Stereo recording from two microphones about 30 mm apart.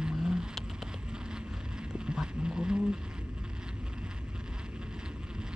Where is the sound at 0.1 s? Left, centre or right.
Right.